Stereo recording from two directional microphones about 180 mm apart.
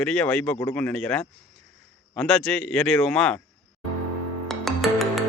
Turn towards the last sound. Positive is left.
turn(degrees=0)  # may be behind; listen again after turning